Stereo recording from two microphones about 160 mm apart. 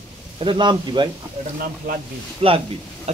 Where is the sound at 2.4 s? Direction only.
40° right (ahead or behind).